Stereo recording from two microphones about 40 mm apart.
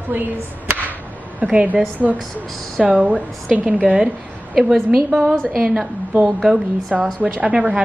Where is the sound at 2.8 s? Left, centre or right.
Right.